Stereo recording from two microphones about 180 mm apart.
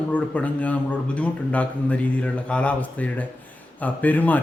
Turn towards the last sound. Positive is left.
turn(degrees=10)  # may be behind; listen again after turning